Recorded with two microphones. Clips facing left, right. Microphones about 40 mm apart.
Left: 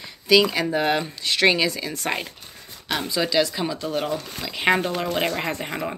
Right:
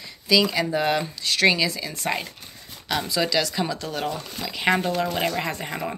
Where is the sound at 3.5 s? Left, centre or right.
Centre; by 5.6 s left.